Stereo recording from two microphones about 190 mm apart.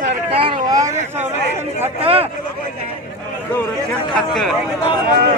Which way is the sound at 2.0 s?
30° right (ahead or behind).